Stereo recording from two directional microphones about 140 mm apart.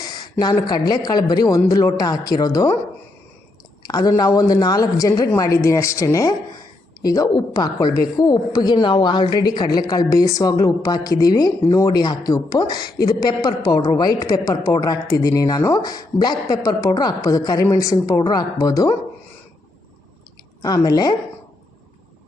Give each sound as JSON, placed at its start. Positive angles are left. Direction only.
{"t": 0.0, "sound": "a sound", "side_deg": 30}
{"t": 0.7, "sound": "a woman's voice", "side_deg": 30}
{"t": 3.8, "sound": "a woman's voice", "side_deg": 30}
{"t": 20.6, "sound": "a woman's voice", "side_deg": 25}